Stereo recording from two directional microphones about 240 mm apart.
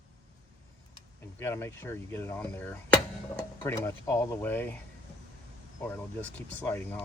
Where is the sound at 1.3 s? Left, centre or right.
Centre.